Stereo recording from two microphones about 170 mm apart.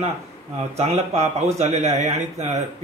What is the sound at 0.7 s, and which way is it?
A man's voice, 40° right (ahead or behind).